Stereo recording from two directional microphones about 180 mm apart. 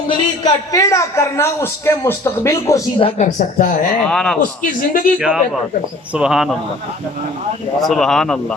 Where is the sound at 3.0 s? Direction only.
30° left (ahead or behind).